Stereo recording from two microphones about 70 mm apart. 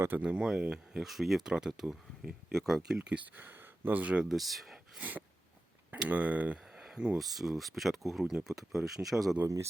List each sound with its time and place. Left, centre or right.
0.2 s speech: centre
1.0 s speech: centre
3.3 s speech: right
4.3 s speech: centre
4.9 s speech: right
6.7 s a sound: centre
7.2 s speech: centre
8.2 s speech: centre
8.4 s speech: centre